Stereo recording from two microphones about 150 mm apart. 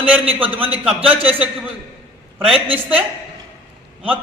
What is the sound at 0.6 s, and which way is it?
Speech, 10° right (ahead or behind).